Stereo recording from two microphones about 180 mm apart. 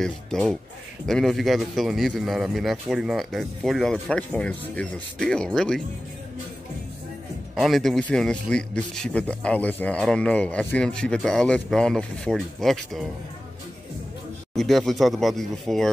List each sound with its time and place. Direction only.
0.0 s a man's voice: 5° left (ahead or behind)
7.5 s a man's voice: centre (ahead or behind)
14.5 s a man's voice: centre (ahead or behind)